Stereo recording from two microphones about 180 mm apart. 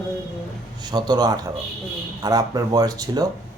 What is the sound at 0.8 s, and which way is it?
Speech, 25° right (ahead or behind).